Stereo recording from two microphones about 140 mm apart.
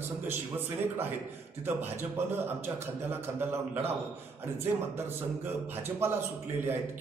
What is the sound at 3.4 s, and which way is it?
Speech, 15° right (ahead or behind).